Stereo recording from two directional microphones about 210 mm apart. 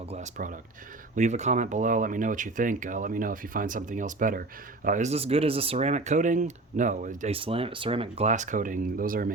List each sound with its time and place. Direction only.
0.1 s speech: 35° right (ahead or behind)